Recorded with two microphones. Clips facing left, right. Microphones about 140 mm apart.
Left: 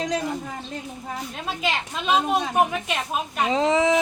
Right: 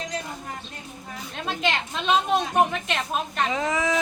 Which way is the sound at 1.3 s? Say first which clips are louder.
Right 2 dB; 5° left (ahead or behind).